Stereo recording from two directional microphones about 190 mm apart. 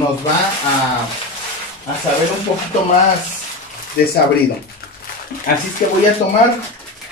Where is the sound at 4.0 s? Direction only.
55° left (ahead or behind).